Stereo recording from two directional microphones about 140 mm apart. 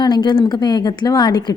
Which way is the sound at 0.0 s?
30° left (ahead or behind).